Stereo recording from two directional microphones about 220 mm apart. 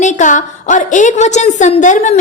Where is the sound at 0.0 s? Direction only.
35° left (ahead or behind).